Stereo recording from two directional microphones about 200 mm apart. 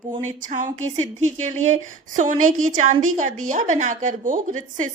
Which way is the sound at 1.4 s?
35° right (ahead or behind).